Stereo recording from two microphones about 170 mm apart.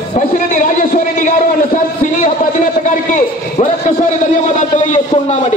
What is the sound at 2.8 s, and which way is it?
A man's voice, 45° left (ahead or behind).